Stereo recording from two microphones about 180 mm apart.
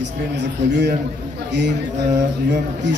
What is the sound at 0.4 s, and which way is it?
Speech, 70° right (ahead or behind).